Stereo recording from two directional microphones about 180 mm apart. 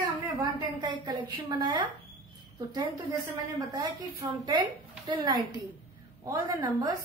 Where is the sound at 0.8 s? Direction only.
25° right (ahead or behind).